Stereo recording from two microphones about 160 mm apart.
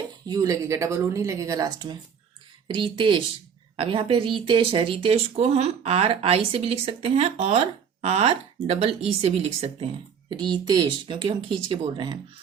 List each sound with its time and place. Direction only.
0.3 s speech: 25° right (ahead or behind); by 9.9 s 40° right (ahead or behind)
10.2 s speech: 30° right (ahead or behind)